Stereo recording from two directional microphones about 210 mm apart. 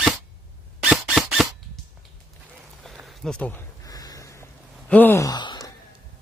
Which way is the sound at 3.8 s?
15° left (ahead or behind).